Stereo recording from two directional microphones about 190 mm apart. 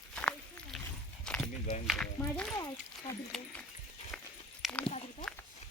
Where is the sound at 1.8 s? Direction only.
Centre (ahead or behind).